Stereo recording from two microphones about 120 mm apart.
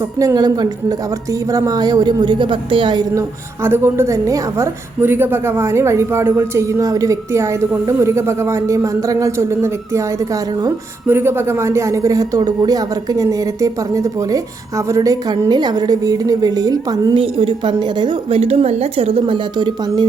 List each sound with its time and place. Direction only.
0.2 s a woman's voice: 30° right (ahead or behind)
3.6 s a woman's voice: 20° right (ahead or behind)
17.2 s a woman's voice: 45° right (ahead or behind)